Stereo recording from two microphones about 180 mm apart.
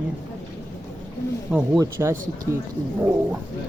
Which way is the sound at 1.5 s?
5° right (ahead or behind).